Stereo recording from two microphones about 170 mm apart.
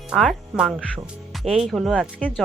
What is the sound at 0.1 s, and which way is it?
Speech, centre (ahead or behind).